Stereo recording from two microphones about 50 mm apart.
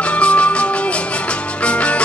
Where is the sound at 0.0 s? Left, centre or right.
Left.